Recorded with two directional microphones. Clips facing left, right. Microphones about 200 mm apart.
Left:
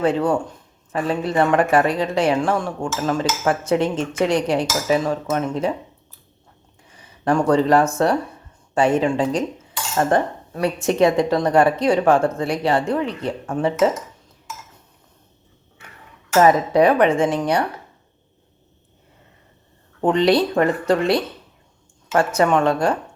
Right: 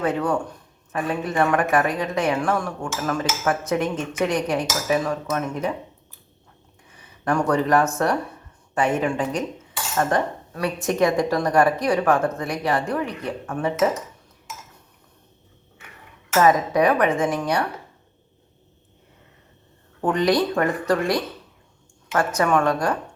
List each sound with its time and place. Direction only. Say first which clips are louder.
0.0 s a woman's voice: left 4 dB; 30° left (ahead or behind)
6.8 s a woman's voice: left 4 dB; 30° left (ahead or behind)
16.4 s a woman's voice: left 3 dB; 30° left (ahead or behind)
20.0 s a woman's voice: left 3 dB; 25° left (ahead or behind)